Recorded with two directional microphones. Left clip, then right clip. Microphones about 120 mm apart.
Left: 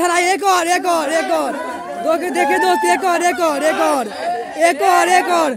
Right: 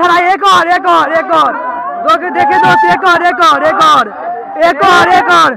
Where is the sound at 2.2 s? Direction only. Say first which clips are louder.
Right 6 dB; 40° left (ahead or behind).